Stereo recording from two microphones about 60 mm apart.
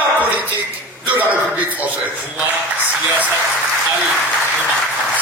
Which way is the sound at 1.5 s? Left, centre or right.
Right.